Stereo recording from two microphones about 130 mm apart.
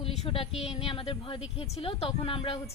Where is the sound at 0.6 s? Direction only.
50° left (ahead or behind).